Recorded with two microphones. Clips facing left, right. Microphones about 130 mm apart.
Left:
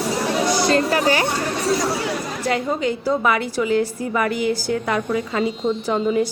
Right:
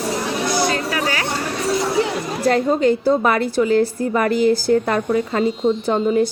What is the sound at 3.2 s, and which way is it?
A woman's voice, 35° right (ahead or behind).